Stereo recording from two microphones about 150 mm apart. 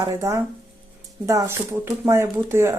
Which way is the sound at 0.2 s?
20° right (ahead or behind).